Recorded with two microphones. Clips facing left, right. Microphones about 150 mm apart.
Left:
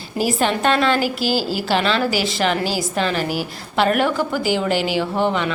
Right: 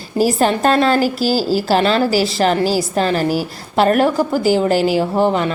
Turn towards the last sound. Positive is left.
turn(degrees=-40)  # may be behind; listen again after turning